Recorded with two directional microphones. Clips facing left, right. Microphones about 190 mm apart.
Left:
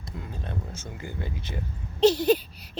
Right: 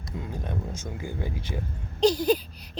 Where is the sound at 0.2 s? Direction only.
15° right (ahead or behind).